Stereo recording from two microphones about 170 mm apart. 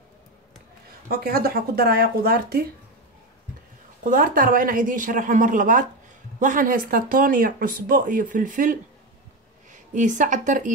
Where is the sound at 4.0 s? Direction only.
55° right (ahead or behind).